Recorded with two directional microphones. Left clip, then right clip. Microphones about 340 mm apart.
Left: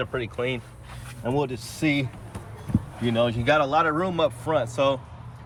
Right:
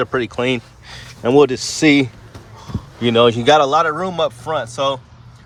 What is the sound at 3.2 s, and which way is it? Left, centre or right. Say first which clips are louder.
Speech: right 10 dB; centre.